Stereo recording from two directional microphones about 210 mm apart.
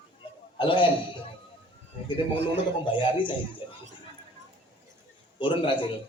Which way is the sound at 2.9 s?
25° left (ahead or behind).